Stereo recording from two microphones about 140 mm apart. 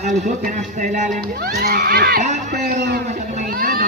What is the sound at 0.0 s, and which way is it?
Speech, 65° right (ahead or behind).